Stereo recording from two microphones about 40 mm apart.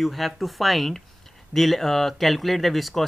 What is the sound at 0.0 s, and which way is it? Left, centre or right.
Speech, centre.